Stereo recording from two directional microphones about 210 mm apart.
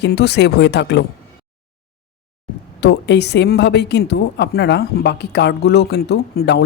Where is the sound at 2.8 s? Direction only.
55° left (ahead or behind).